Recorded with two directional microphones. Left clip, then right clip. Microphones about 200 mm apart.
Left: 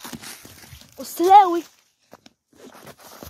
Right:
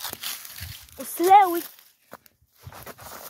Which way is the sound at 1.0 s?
15° left (ahead or behind).